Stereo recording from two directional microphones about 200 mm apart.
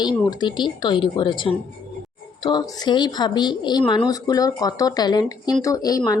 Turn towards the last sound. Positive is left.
turn(degrees=20)  # may be behind; listen again after turning